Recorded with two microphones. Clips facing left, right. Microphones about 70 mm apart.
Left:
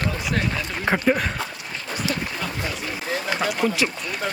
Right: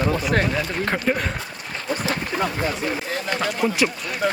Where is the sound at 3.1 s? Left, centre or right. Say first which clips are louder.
Even; centre.